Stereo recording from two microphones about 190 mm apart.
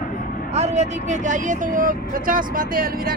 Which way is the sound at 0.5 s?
35° right (ahead or behind).